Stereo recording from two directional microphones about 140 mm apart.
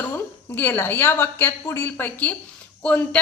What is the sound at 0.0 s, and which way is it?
A woman's voice, 15° left (ahead or behind).